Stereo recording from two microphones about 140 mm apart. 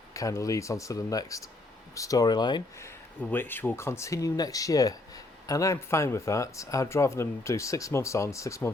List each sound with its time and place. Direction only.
0.1 s speech: 25° left (ahead or behind)
2.8 s speech: 15° left (ahead or behind)